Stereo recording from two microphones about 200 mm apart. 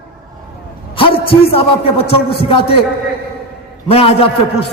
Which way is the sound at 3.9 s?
30° left (ahead or behind).